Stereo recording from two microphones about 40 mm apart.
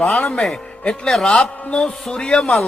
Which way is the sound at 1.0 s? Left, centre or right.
Centre.